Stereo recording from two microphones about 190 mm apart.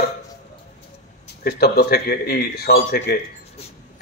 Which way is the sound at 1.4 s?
55° left (ahead or behind).